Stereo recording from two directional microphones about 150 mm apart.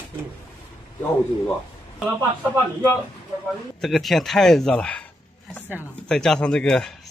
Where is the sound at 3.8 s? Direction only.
Centre (ahead or behind).